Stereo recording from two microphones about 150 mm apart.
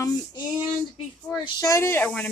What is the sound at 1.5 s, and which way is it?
Speech, 20° left (ahead or behind).